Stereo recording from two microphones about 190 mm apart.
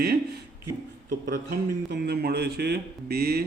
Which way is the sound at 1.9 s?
55° right (ahead or behind).